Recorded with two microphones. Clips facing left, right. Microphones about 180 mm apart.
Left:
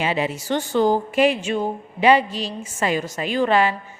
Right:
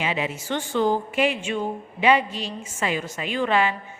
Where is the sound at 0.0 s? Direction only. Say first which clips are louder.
Left 4 dB; 35° left (ahead or behind).